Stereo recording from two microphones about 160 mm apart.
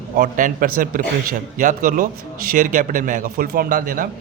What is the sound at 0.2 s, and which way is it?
A man's voice, 55° right (ahead or behind).